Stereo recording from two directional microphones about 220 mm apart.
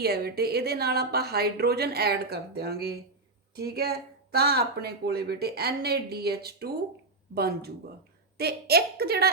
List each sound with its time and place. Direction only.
0.0 s speech: 45° right (ahead or behind)